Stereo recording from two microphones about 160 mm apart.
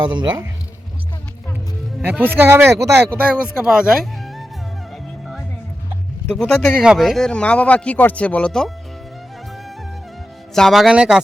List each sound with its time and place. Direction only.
0.0 s speech: 30° right (ahead or behind)
2.0 s speech: 10° right (ahead or behind)
5.2 s music: centre (ahead or behind)
6.3 s a man's voice: 5° left (ahead or behind)
10.5 s speech: centre (ahead or behind)